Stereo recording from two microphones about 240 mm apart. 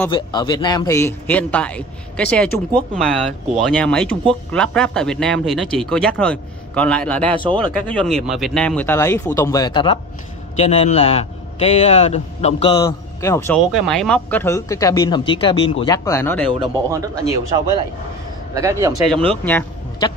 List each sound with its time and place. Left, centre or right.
0.1 s speech: centre
7.4 s speech: right
7.9 s a man's voice: centre
13.7 s speech: centre
16.9 s speech: centre
19.0 s speech: centre